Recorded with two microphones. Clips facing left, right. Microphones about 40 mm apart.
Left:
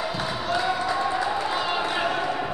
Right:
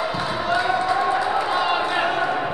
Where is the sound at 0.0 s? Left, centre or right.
Centre.